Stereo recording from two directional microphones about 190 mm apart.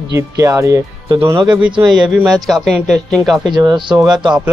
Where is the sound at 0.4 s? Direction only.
15° right (ahead or behind).